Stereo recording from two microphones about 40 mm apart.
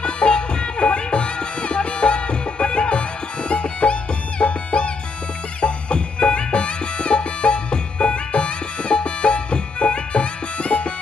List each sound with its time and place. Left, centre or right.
0.0 s music: left